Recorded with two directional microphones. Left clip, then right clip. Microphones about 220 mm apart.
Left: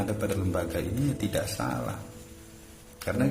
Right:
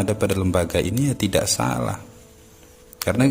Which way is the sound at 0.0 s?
40° right (ahead or behind).